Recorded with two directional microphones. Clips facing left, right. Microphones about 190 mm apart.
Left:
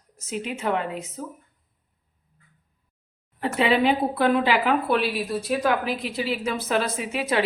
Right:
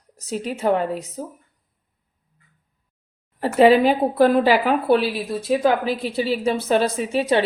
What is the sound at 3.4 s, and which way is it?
Speech, 40° right (ahead or behind).